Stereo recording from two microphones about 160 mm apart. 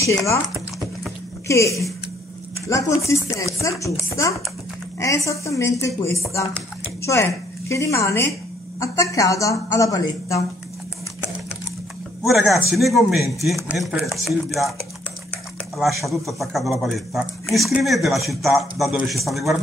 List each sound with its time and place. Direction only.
0.0 s speech: 20° left (ahead or behind)
1.5 s speech: 20° left (ahead or behind)
12.2 s speech: centre (ahead or behind)
15.8 s speech: centre (ahead or behind)